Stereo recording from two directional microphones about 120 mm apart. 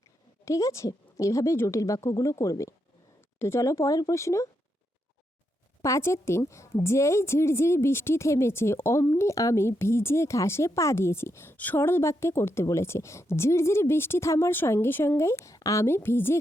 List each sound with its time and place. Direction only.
0.4 s a woman's voice: 25° left (ahead or behind)
5.8 s a woman's voice: 25° left (ahead or behind)